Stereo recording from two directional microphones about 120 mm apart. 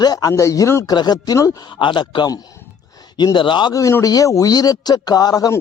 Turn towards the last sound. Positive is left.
turn(degrees=30)  # may be behind; listen again after turning